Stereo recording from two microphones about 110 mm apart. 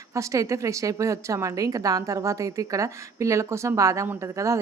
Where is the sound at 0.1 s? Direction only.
30° right (ahead or behind).